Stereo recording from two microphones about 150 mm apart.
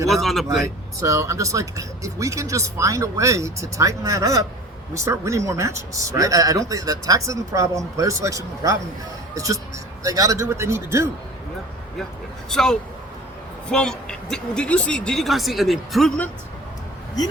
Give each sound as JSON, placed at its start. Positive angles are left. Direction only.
{"t": 0.1, "sound": "speech", "side_deg": 0}
{"t": 0.9, "sound": "speech", "side_deg": -20}
{"t": 12.5, "sound": "speech", "side_deg": 5}